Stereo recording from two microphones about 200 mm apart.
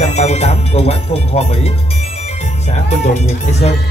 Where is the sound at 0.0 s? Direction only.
35° left (ahead or behind).